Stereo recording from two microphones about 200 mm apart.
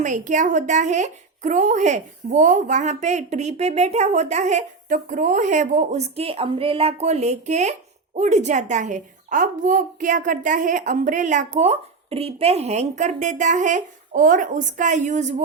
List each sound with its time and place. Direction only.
0.0 s a woman's voice: 40° right (ahead or behind)